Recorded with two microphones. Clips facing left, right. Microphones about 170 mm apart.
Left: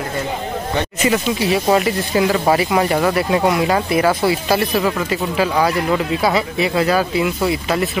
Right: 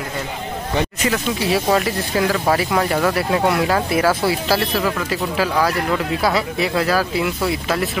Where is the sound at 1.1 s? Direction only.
10° left (ahead or behind).